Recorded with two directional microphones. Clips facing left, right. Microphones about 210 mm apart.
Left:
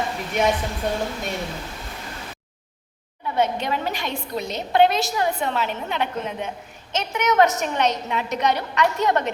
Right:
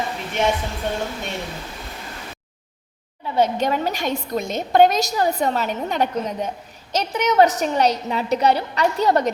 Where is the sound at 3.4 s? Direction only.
45° right (ahead or behind).